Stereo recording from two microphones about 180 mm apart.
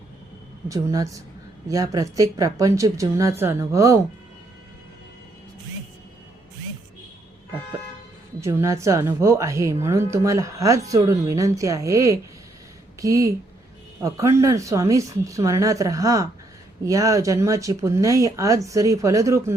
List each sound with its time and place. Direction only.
0.7 s a woman's voice: 20° right (ahead or behind)
8.4 s a woman's voice: 15° right (ahead or behind)